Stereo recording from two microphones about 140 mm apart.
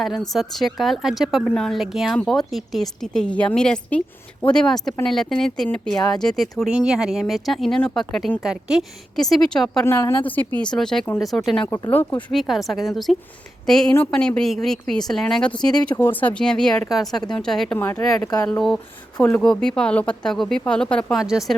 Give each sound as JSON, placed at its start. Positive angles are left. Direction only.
{"t": 0.3, "sound": "speech", "side_deg": 0}
{"t": 9.8, "sound": "a woman's voice", "side_deg": 20}
{"t": 10.6, "sound": "a woman's voice", "side_deg": 5}
{"t": 18.2, "sound": "speech", "side_deg": 25}
{"t": 18.4, "sound": "speech", "side_deg": 5}